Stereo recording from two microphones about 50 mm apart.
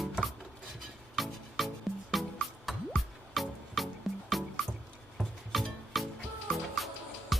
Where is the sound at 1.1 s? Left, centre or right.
Centre.